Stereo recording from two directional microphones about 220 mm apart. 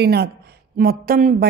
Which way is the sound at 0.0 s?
50° right (ahead or behind).